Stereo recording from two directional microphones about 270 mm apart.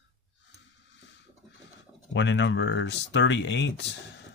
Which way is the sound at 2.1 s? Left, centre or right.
Left.